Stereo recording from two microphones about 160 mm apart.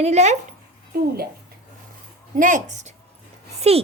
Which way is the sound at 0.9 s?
75° right (ahead or behind).